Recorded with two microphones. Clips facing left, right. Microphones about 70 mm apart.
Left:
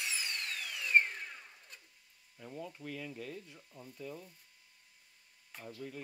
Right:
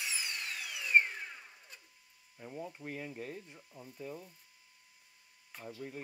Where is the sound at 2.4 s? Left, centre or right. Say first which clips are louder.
Right 1 dB; right.